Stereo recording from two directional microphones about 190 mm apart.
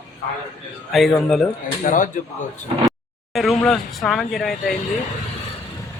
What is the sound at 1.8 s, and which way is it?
Speech, 45° left (ahead or behind).